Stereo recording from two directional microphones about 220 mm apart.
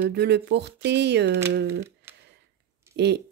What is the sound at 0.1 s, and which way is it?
Speech, 50° right (ahead or behind).